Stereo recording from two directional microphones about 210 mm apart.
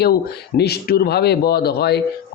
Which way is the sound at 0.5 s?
50° left (ahead or behind).